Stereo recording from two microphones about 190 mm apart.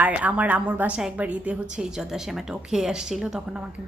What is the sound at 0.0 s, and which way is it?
A woman's voice, 5° right (ahead or behind).